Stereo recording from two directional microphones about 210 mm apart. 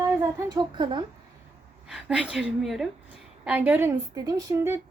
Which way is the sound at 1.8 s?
Centre (ahead or behind).